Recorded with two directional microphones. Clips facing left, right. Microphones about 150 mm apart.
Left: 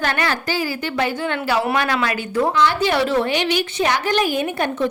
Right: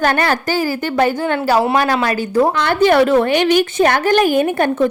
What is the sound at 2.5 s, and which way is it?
A woman's voice, 55° right (ahead or behind).